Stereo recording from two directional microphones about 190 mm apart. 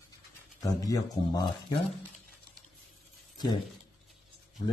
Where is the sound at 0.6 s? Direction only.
20° left (ahead or behind).